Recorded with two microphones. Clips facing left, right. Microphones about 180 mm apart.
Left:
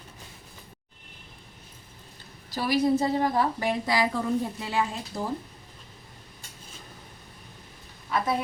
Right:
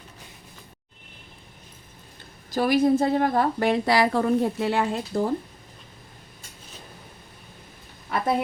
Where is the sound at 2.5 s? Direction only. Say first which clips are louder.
Right 4 dB; 50° right (ahead or behind).